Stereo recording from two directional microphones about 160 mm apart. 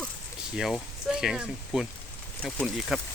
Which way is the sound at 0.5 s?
Centre (ahead or behind).